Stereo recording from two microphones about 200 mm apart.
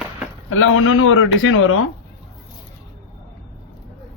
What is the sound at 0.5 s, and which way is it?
A man's voice, 90° left.